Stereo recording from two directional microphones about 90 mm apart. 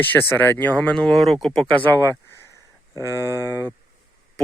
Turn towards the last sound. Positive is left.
turn(degrees=-40)  # may be behind; listen again after turning